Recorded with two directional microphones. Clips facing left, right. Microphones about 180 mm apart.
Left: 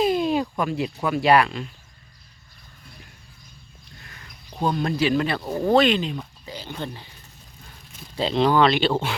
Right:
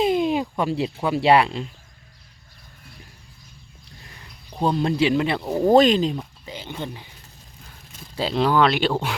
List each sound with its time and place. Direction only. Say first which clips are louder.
0.0 s a sound: right 1 dB; 20° right (ahead or behind)
0.6 s speech: right 2 dB; 30° right (ahead or behind)
4.6 s speech: right 2 dB; 25° right (ahead or behind)
5.7 s speech: right 3 dB; 40° right (ahead or behind)
6.1 s a sound: right 1 dB; 15° right (ahead or behind)
8.3 s speech: left 1 dB; 5° right (ahead or behind)